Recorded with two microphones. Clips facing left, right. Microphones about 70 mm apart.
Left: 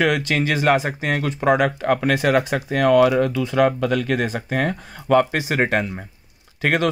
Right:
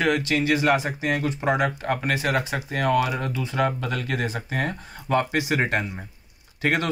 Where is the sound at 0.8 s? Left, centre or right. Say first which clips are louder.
Left 2 dB; left.